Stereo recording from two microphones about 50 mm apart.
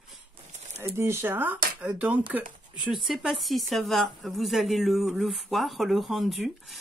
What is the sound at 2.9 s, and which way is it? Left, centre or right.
A woman's voice, centre.